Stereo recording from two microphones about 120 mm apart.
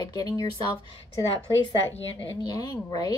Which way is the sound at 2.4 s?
35° left (ahead or behind).